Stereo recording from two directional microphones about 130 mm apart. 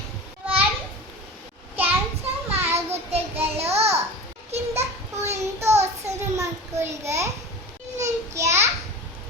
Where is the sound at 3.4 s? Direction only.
50° right (ahead or behind).